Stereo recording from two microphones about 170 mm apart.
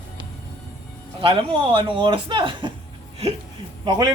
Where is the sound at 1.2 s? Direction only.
35° right (ahead or behind).